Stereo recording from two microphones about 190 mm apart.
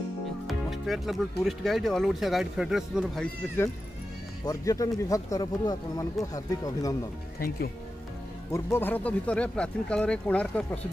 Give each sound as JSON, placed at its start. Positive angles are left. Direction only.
{"t": 0.5, "sound": "speech", "side_deg": 0}
{"t": 4.5, "sound": "speech", "side_deg": 15}
{"t": 7.3, "sound": "speech", "side_deg": 50}
{"t": 8.5, "sound": "speech", "side_deg": 15}